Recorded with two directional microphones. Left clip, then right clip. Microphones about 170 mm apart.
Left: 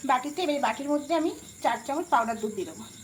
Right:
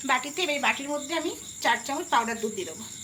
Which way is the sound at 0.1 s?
45° left (ahead or behind).